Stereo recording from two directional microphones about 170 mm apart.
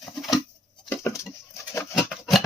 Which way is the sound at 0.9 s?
15° left (ahead or behind).